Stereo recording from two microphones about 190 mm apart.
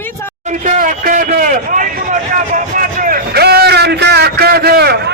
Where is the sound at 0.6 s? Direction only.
45° right (ahead or behind).